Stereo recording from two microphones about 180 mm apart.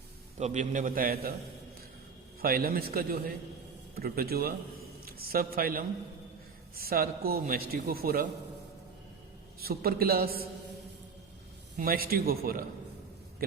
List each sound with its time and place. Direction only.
0.3 s a man's voice: 40° right (ahead or behind); by 1.3 s 55° right (ahead or behind)
2.4 s a man's voice: 55° right (ahead or behind)
9.6 s a man's voice: 55° right (ahead or behind)
11.8 s a man's voice: 55° right (ahead or behind)